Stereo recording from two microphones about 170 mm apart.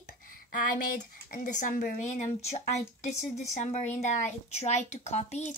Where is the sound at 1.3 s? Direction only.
50° left (ahead or behind).